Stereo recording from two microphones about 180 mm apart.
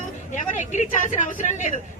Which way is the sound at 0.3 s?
45° left (ahead or behind).